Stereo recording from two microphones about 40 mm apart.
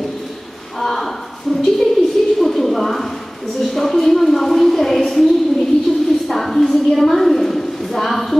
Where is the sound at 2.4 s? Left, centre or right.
Centre.